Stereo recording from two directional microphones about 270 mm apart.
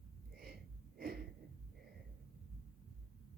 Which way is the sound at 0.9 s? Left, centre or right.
Right.